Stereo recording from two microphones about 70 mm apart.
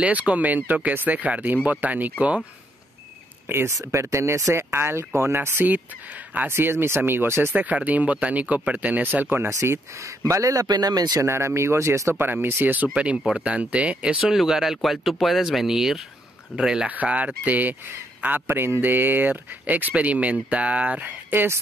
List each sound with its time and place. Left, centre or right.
0.0 s speech: centre
3.4 s speech: right
6.0 s speech: right
6.5 s speech: right
7.5 s speech: right
9.5 s speech: right
11.1 s speech: right
12.9 s speech: centre